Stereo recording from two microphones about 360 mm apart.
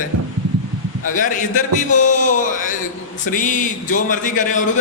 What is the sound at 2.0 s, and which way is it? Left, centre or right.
A man's voice, left.